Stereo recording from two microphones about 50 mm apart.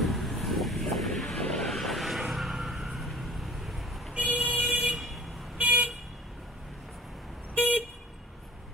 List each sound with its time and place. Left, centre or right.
0.0 s vehicle: centre
1.3 s a sound: centre
1.7 s vehicle: centre
4.1 s vehicle: right
4.9 s vehicle: centre
5.6 s vehicle: right